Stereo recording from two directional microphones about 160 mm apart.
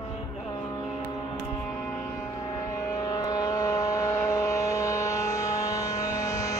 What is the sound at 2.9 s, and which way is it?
Vehicle, 20° left (ahead or behind).